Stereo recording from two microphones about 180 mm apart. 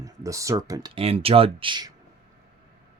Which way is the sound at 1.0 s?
30° right (ahead or behind).